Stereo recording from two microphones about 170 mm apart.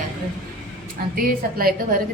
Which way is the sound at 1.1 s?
60° right (ahead or behind).